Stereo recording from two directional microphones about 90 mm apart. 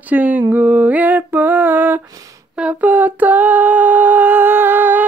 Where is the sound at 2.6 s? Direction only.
15° right (ahead or behind).